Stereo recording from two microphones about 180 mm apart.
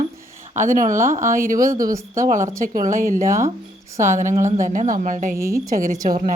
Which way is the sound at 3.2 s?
15° right (ahead or behind).